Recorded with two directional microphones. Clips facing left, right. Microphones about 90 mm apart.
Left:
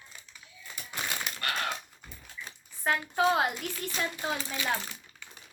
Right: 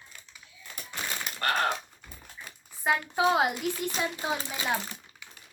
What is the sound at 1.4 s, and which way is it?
Gunshot, 40° right (ahead or behind).